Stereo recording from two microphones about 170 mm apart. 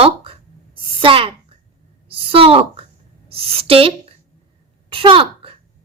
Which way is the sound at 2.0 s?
35° right (ahead or behind).